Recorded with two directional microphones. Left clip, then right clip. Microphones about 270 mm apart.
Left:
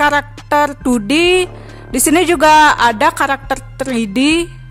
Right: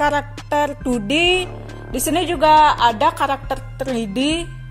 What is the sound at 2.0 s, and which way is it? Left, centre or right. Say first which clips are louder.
Music: left 7 dB; left.